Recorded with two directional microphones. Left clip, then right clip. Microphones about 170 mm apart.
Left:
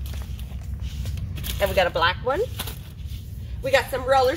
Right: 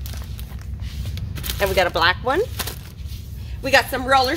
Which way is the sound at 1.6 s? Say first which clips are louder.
Right 2 dB; 25° right (ahead or behind).